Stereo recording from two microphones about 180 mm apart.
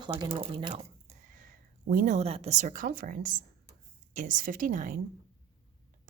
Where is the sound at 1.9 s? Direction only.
45° right (ahead or behind).